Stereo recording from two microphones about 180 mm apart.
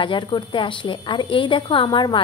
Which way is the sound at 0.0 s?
25° left (ahead or behind).